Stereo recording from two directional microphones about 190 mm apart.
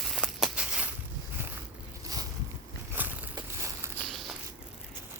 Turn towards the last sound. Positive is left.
turn(degrees=0)  # may be behind; listen again after turning